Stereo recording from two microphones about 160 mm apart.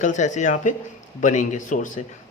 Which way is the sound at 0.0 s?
50° left (ahead or behind).